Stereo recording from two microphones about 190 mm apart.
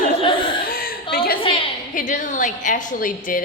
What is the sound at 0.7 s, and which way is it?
Chuckle, 50° left (ahead or behind).